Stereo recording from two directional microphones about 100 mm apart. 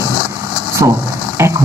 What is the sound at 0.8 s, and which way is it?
Speech, 45° right (ahead or behind).